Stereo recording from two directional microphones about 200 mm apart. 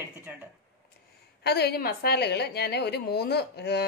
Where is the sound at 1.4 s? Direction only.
55° left (ahead or behind).